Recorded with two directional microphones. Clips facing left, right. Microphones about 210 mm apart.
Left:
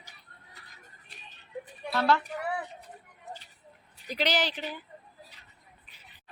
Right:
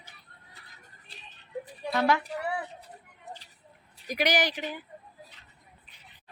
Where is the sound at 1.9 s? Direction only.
15° right (ahead or behind).